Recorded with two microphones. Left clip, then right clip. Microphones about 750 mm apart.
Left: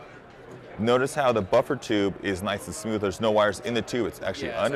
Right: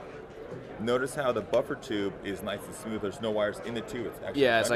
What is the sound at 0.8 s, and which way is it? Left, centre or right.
Speech, left.